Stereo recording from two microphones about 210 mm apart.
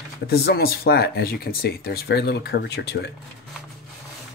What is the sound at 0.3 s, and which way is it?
Speech, 50° left (ahead or behind).